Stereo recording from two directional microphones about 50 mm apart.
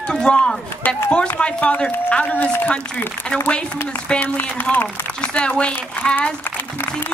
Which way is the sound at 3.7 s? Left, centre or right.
Left.